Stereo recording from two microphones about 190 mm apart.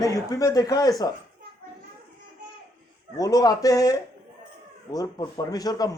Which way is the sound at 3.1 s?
20° left (ahead or behind).